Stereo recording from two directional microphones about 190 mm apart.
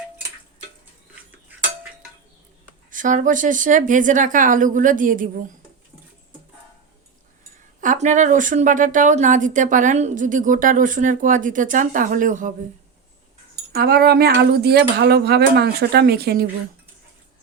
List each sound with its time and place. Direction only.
2.9 s a woman's voice: 40° right (ahead or behind)
7.8 s a woman's voice: 40° right (ahead or behind)
13.7 s speech: 55° right (ahead or behind)